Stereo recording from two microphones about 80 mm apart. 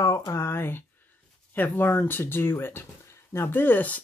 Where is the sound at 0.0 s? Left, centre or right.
Left.